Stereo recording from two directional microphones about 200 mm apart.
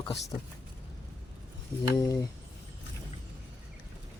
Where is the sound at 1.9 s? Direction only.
15° left (ahead or behind).